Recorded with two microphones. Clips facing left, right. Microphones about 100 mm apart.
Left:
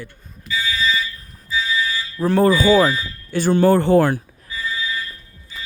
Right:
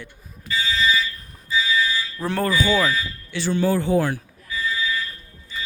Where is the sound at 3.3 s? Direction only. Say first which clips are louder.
Left 7 dB; 45° left (ahead or behind).